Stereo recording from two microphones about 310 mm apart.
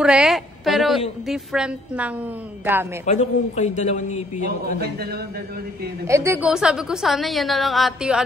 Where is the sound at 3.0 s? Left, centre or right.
Left.